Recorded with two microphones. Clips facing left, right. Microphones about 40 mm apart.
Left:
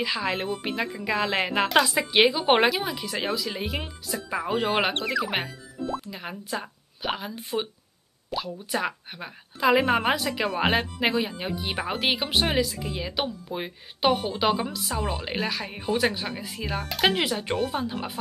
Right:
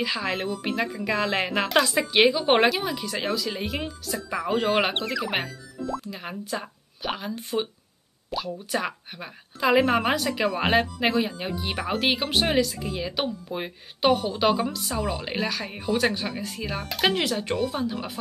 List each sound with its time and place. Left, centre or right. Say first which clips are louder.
0.0 s a woman's voice: even; centre
14.1 s a woman's voice: right 2 dB; centre
14.4 s a woman's voice: right 2 dB; centre
17.6 s a woman's voice: even; left